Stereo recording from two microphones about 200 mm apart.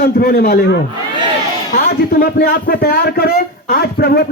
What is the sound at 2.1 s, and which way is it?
A man's voice, 50° left (ahead or behind).